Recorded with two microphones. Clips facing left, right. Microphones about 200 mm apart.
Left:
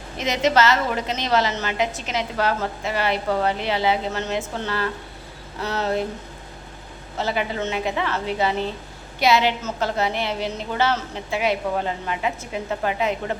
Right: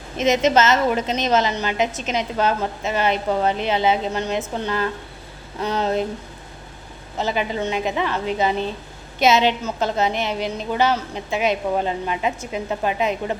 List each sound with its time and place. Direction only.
0.2 s a woman's voice: 20° right (ahead or behind)
7.2 s a woman's voice: 20° right (ahead or behind)